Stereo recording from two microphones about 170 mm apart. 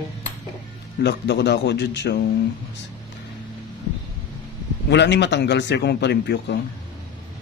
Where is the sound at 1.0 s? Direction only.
85° left.